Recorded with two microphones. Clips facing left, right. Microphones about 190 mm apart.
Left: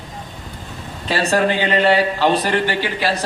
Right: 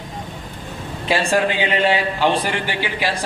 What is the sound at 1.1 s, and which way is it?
Speech, 40° left (ahead or behind).